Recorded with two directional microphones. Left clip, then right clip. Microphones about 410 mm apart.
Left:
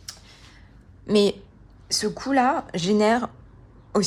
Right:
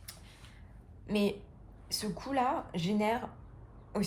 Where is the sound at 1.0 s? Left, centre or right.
Centre.